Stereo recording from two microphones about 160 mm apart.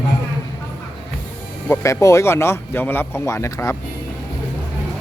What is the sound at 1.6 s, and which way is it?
Speech, 20° left (ahead or behind).